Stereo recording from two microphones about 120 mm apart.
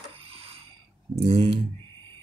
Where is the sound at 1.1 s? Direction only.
55° right (ahead or behind).